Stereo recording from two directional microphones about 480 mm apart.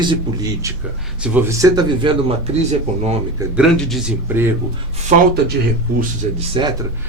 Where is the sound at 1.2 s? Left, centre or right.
Centre.